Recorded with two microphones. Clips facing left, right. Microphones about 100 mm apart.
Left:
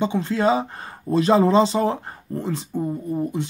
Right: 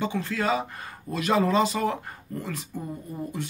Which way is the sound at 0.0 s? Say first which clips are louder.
Left 7 dB; 25° left (ahead or behind).